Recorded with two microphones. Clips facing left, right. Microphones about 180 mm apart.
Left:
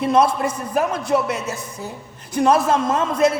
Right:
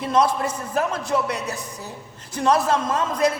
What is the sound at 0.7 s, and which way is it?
A man's voice, 20° left (ahead or behind).